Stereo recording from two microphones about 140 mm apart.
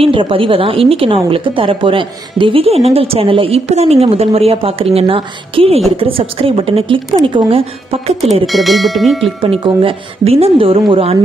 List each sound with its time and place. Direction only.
0.0 s a woman's voice: 40° right (ahead or behind)
8.5 s speech: centre (ahead or behind)
9.4 s a woman's voice: 40° right (ahead or behind)